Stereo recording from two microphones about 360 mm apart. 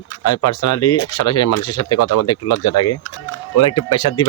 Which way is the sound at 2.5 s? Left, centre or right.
Left.